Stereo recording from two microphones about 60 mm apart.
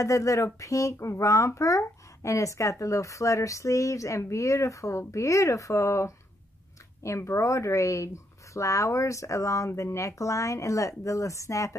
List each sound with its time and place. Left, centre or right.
0.0 s speech: left
7.2 s speech: left